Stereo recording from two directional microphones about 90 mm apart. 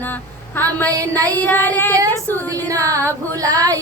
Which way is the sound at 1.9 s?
40° right (ahead or behind).